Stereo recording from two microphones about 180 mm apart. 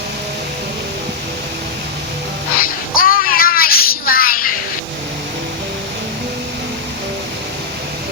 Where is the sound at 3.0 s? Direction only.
55° left (ahead or behind).